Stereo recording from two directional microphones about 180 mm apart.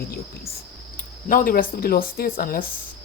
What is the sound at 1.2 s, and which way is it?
Speech, 50° left (ahead or behind).